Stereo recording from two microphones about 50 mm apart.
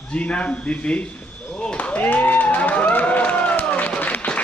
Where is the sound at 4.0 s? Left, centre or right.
Left.